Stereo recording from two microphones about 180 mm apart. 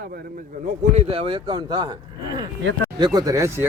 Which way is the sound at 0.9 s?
35° right (ahead or behind).